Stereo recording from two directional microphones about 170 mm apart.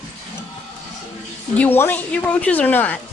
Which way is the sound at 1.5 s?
10° left (ahead or behind).